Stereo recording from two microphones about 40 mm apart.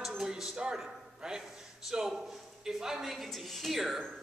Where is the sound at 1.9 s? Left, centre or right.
Centre.